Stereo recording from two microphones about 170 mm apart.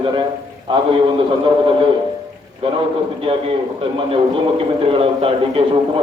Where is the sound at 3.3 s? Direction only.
35° right (ahead or behind).